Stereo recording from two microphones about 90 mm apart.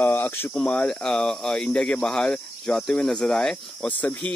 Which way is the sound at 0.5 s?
10° left (ahead or behind).